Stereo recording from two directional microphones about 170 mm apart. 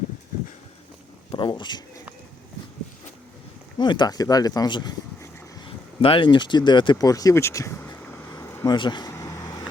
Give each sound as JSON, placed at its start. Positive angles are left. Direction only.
{"t": 1.3, "sound": "speech", "side_deg": 30}
{"t": 3.8, "sound": "speech", "side_deg": 25}
{"t": 8.3, "sound": "vehicle", "side_deg": 20}